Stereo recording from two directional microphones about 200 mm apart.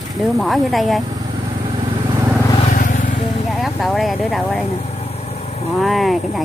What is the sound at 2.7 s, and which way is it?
Vehicle, 40° left (ahead or behind).